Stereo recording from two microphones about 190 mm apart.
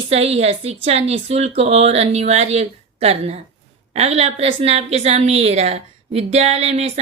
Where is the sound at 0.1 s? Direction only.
35° right (ahead or behind).